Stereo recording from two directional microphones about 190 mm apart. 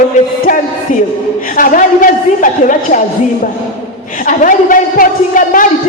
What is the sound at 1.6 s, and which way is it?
A man's voice, 45° left (ahead or behind).